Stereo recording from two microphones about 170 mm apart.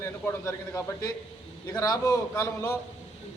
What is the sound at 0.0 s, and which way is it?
A man's voice, 15° left (ahead or behind).